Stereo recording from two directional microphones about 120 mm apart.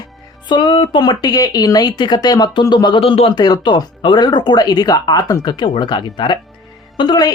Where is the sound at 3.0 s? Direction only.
50° left (ahead or behind).